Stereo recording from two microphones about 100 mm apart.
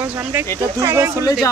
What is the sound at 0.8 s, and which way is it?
Speech, 25° right (ahead or behind).